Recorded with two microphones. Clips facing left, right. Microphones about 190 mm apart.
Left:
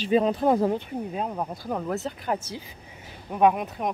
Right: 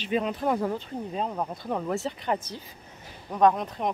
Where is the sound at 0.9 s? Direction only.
5° left (ahead or behind).